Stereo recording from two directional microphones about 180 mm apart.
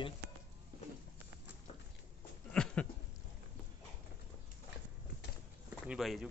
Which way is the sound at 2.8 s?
10° left (ahead or behind).